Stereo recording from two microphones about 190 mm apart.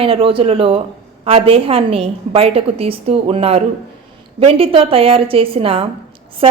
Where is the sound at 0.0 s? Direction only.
30° right (ahead or behind).